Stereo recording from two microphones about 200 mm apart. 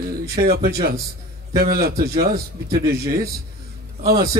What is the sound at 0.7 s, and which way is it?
A man's voice, 50° right (ahead or behind).